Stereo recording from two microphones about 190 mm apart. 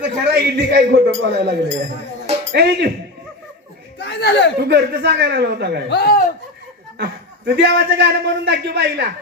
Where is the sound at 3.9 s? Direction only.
60° left (ahead or behind).